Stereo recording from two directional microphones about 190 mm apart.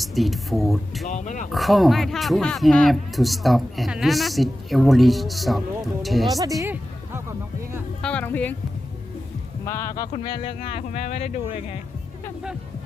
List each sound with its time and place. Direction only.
0.0 s speech: centre (ahead or behind)
1.0 s speech: 40° left (ahead or behind)
1.5 s speech: centre (ahead or behind)
6.6 s music: 15° right (ahead or behind)
8.0 s speech: 10° left (ahead or behind)
9.6 s speech: 15° left (ahead or behind); by 11.5 s 40° left (ahead or behind)